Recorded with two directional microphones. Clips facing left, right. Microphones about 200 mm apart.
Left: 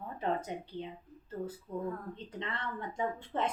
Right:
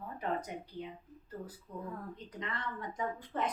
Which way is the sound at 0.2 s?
25° left (ahead or behind).